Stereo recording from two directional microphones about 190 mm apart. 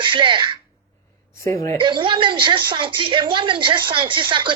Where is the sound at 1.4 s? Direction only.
15° left (ahead or behind).